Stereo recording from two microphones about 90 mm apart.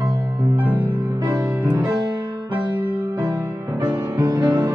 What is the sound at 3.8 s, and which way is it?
Music, 50° right (ahead or behind).